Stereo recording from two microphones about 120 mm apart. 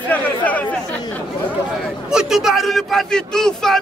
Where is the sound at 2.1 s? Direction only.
5° right (ahead or behind).